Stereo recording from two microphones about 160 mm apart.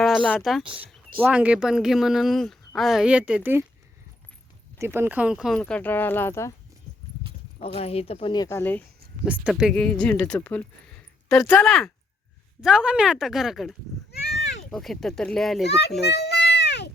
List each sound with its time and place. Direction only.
0.0 s speech: 5° left (ahead or behind)
0.6 s speech: 35° right (ahead or behind)
1.2 s speech: 10° right (ahead or behind)
4.8 s speech: 15° right (ahead or behind); by 6.5 s 15° left (ahead or behind)
7.6 s speech: 40° left (ahead or behind); by 8.8 s 15° left (ahead or behind)
9.2 s speech: 5° right (ahead or behind)
9.7 s speech: 5° left (ahead or behind)
15.6 s a child's voice: 90° left
16.0 s a sound: 90° left